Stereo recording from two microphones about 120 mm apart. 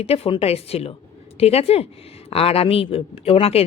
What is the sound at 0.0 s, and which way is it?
Speech, 55° left (ahead or behind).